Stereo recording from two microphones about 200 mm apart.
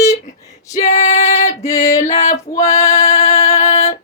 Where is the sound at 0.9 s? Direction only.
30° left (ahead or behind).